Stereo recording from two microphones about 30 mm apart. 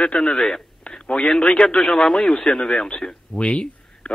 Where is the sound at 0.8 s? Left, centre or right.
Left.